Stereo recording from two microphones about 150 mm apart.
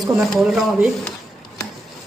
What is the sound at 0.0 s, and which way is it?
Speech, centre (ahead or behind).